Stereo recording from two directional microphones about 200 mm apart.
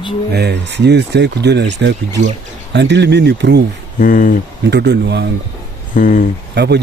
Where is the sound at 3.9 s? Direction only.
40° left (ahead or behind).